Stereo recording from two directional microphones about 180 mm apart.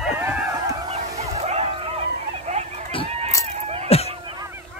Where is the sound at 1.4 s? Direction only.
35° right (ahead or behind).